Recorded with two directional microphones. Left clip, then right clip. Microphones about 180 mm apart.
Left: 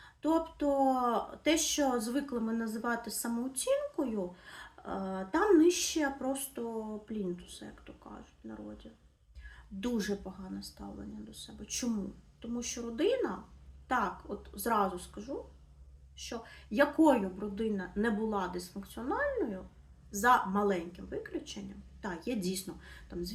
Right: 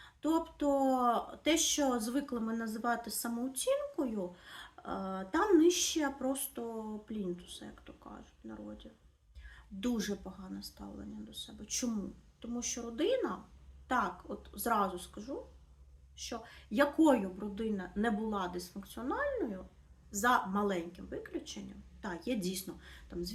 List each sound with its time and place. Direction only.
0.0 s speech: 15° right (ahead or behind)